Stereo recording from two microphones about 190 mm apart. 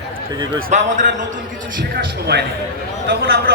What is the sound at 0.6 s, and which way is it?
Speech, 40° right (ahead or behind).